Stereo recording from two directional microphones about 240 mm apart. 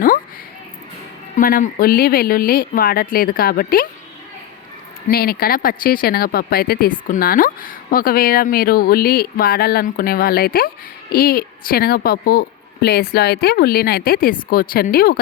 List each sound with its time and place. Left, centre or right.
1.4 s speech: left
5.0 s speech: left